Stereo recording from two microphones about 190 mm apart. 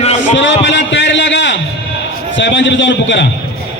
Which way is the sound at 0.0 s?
35° left (ahead or behind).